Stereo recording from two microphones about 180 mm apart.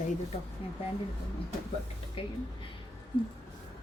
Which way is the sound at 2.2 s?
30° left (ahead or behind).